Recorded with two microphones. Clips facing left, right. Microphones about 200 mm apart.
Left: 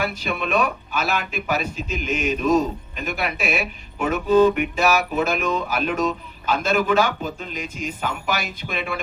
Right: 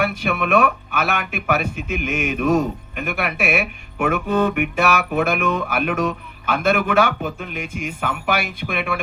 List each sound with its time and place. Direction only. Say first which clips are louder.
0.0 s speech: right 4 dB; 65° right (ahead or behind)